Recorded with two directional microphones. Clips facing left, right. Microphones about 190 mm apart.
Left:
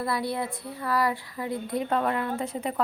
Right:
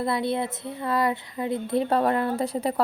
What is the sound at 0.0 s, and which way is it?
Speech, 25° right (ahead or behind).